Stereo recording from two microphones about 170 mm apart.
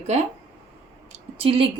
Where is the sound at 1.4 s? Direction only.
35° right (ahead or behind).